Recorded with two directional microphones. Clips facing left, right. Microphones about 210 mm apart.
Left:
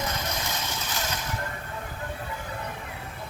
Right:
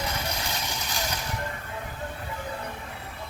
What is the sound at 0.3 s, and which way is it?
Vehicle, 15° right (ahead or behind).